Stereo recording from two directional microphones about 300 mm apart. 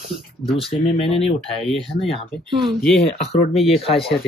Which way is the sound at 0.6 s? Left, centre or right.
Centre.